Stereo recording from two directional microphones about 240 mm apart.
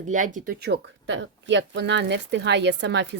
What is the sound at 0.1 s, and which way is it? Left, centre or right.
Speech, right.